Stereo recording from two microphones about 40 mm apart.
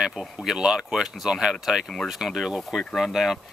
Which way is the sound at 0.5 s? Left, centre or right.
Right.